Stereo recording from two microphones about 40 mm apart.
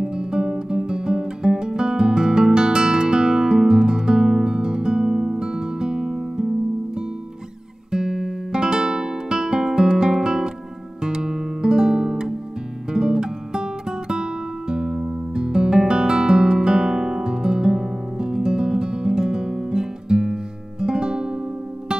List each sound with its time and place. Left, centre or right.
0.0 s guitar: centre
7.9 s music: centre